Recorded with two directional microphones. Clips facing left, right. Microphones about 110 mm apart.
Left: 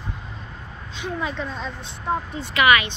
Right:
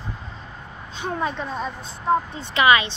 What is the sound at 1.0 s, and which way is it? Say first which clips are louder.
Speech: right 2 dB; 40° right (ahead or behind).